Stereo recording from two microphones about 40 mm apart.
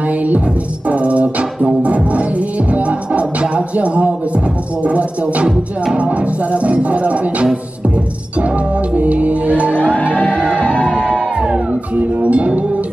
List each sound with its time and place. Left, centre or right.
0.8 s music: right
10.5 s music: left
11.3 s music: right
12.0 s music: right